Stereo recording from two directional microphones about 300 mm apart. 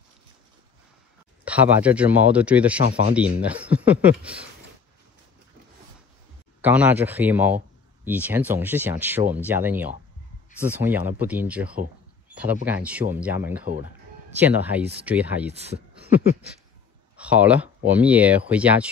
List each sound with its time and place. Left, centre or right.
1.4 s speech: centre
6.6 s speech: centre
12.3 s a sound: centre
12.6 s speech: centre
15.5 s speech: right
17.2 s speech: centre